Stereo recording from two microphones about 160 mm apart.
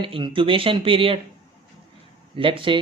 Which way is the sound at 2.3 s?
35° right (ahead or behind).